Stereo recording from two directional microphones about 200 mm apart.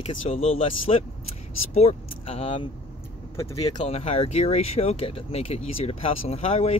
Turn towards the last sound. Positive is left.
turn(degrees=30)  # may be behind; listen again after turning